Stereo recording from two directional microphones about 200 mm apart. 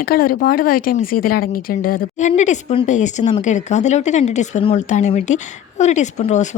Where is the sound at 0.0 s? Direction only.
45° left (ahead or behind).